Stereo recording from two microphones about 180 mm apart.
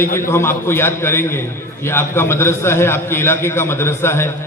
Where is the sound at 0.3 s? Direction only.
15° left (ahead or behind).